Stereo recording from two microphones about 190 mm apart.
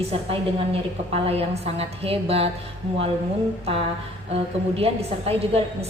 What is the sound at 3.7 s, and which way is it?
A woman's voice, 30° right (ahead or behind).